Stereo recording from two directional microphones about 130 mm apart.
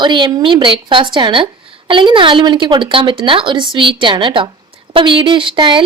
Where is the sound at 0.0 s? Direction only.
35° right (ahead or behind).